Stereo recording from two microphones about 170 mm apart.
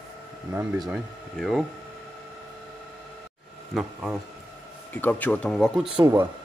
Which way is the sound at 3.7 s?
Centre (ahead or behind).